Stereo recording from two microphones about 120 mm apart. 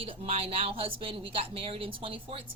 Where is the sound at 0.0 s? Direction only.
55° right (ahead or behind).